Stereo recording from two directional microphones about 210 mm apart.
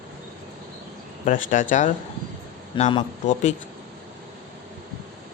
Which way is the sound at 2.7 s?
25° left (ahead or behind).